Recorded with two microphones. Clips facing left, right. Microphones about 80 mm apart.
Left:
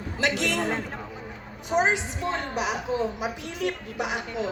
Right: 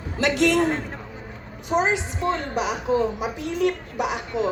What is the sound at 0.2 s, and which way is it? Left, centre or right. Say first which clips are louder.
Speech: right 6 dB; right.